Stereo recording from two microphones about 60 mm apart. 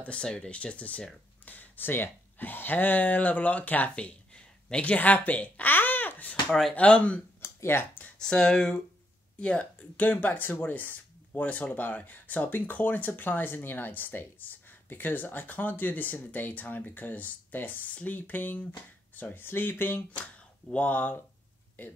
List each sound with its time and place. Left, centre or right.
0.0 s speech: centre
7.4 s speech: left
8.2 s speech: centre; by 20.0 s left
20.7 s speech: left